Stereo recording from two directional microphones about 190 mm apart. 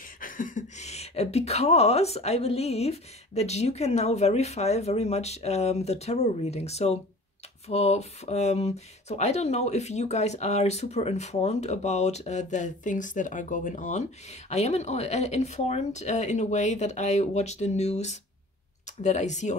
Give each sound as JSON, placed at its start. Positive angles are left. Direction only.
{"t": 0.2, "sound": "speech", "side_deg": 45}